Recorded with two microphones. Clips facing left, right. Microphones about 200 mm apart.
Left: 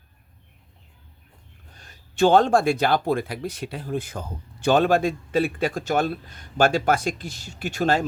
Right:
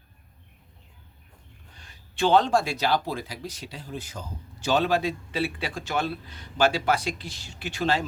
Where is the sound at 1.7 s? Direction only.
45° left (ahead or behind).